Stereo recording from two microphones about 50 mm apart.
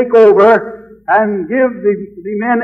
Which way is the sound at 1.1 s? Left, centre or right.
Centre.